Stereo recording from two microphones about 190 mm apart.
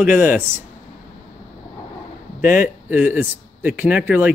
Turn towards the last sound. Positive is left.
turn(degrees=-10)  # may be behind; listen again after turning